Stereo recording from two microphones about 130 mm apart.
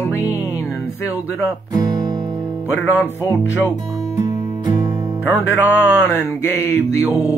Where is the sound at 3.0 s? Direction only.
15° left (ahead or behind).